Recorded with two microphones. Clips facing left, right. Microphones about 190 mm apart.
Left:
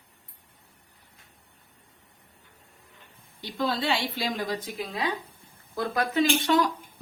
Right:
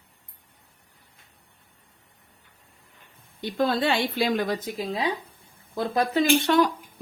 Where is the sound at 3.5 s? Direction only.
55° right (ahead or behind).